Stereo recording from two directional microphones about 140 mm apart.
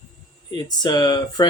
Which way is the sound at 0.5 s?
30° left (ahead or behind).